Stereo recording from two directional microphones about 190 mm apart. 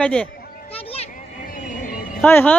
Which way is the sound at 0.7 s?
30° left (ahead or behind).